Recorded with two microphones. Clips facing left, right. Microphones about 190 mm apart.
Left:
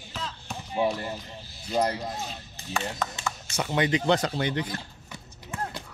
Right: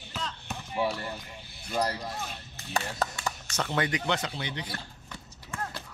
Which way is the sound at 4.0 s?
35° left (ahead or behind).